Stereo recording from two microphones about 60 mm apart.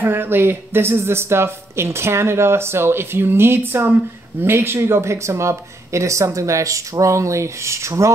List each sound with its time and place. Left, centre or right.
0.0 s speech: right